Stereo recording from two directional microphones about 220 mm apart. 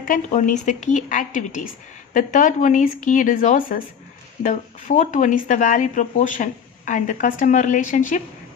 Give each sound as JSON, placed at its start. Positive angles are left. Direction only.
{"t": 0.0, "sound": "speech", "side_deg": 35}